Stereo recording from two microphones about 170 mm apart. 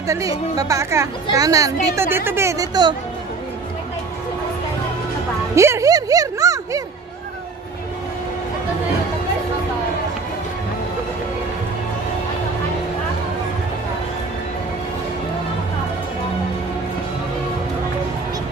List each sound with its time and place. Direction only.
0.0 s speech: 20° right (ahead or behind)
5.5 s speech: 15° right (ahead or behind)